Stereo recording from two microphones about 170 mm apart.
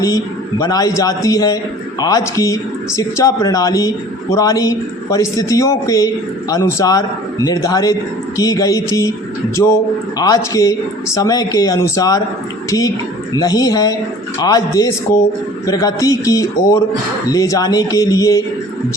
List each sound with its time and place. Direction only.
0.6 s speech: 20° left (ahead or behind)
10.2 s speech: 20° left (ahead or behind)
13.3 s speech: 20° left (ahead or behind)